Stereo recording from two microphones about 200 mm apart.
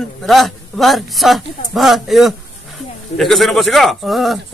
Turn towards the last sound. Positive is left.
turn(degrees=0)  # may be behind; listen again after turning